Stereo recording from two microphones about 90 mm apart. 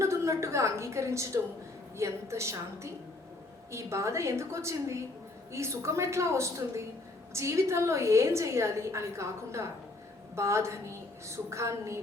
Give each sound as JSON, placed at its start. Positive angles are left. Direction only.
{"t": 0.0, "sound": "a woman's voice", "side_deg": -35}